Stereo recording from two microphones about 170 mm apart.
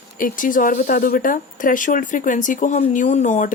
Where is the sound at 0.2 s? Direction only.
55° left (ahead or behind).